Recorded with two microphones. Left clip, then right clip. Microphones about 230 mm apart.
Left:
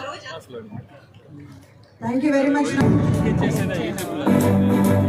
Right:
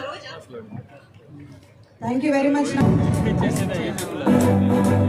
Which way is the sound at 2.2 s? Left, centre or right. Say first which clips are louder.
Left 1 dB; centre.